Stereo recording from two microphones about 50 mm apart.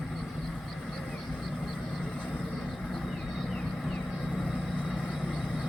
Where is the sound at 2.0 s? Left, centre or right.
Centre.